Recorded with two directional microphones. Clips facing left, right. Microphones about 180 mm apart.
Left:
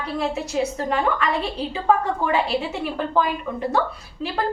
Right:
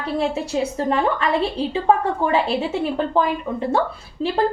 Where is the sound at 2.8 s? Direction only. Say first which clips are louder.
Right 2 dB; 25° right (ahead or behind).